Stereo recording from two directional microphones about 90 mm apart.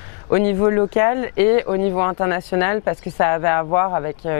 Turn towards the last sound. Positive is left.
turn(degrees=20)  # may be behind; listen again after turning